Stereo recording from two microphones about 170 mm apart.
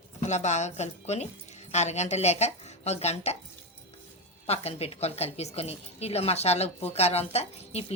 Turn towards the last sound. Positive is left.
turn(degrees=40)  # may be behind; listen again after turning